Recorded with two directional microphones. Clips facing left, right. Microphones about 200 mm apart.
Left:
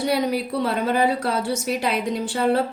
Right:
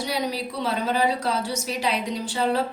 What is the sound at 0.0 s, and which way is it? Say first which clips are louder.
A woman's voice: left 5 dB; 55° left (ahead or behind).